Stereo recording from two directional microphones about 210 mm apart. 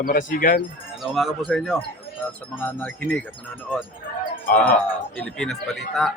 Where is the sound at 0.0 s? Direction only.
40° left (ahead or behind).